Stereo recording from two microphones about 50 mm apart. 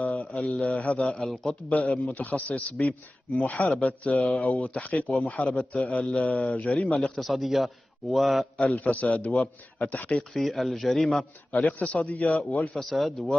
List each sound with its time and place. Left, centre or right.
0.0 s mantra: left
0.4 s speech: left
1.0 s speech: centre
1.7 s speech: left
7.2 s speech: centre
8.5 s speech: left
10.3 s speech: centre
11.5 s speech: left
12.7 s speech: centre